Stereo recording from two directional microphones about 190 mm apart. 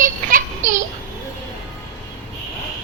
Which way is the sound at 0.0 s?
45° right (ahead or behind).